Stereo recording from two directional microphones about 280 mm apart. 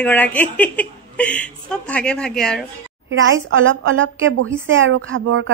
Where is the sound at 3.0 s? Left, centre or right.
Right.